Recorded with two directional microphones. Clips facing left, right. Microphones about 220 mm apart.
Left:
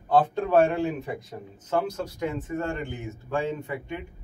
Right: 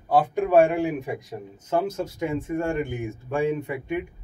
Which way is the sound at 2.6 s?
10° right (ahead or behind).